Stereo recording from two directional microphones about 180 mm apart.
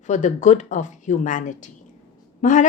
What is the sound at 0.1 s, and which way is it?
A woman's voice, 40° left (ahead or behind).